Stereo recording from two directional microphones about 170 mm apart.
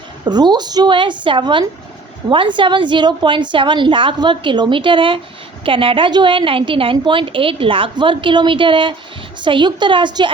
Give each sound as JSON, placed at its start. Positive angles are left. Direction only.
{"t": 0.3, "sound": "a woman's voice", "side_deg": -25}